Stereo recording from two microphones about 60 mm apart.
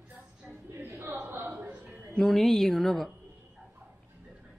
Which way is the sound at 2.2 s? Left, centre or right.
Centre.